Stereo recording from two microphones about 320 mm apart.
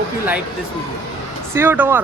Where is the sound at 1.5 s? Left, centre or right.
Centre.